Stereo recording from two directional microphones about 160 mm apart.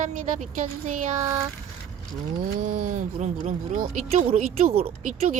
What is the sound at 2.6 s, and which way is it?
Speech, 55° right (ahead or behind).